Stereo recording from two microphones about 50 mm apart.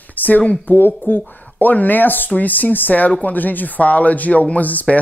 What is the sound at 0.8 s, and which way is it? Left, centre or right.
Speech, left.